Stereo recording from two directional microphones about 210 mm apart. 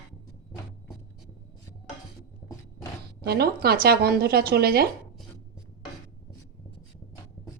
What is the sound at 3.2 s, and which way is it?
Speech, 50° right (ahead or behind).